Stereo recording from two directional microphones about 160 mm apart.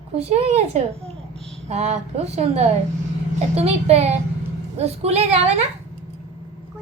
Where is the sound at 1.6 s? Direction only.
40° right (ahead or behind).